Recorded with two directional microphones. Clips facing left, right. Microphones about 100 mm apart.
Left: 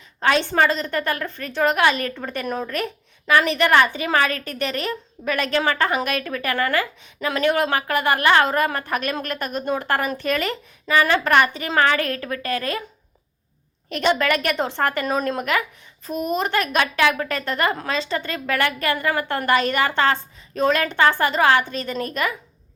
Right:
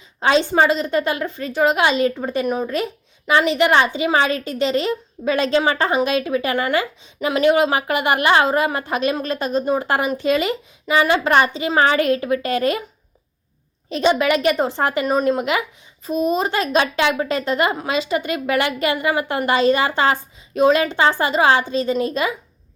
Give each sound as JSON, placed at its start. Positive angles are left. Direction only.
{"t": 0.2, "sound": "a woman's voice", "side_deg": -15}
{"t": 13.9, "sound": "speech", "side_deg": -20}
{"t": 16.0, "sound": "a woman's voice", "side_deg": -20}